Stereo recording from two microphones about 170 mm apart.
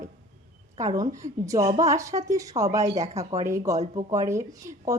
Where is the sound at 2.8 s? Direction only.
40° right (ahead or behind).